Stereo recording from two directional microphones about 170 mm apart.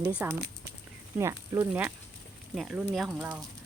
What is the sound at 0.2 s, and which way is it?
Speech, 10° right (ahead or behind).